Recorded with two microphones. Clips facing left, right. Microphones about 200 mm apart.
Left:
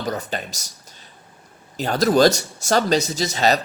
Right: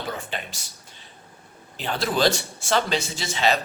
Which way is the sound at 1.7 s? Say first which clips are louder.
Left 8 dB; 40° left (ahead or behind).